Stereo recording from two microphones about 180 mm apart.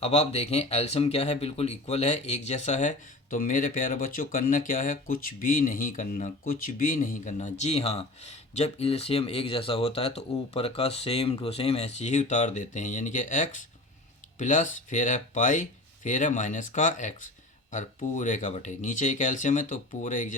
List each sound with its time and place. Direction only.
0.0 s speech: 35° left (ahead or behind)